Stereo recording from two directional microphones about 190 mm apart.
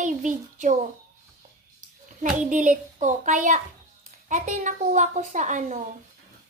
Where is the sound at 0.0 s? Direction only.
40° right (ahead or behind).